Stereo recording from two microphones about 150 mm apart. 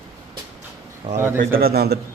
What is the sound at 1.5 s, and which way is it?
Speech, 90° right.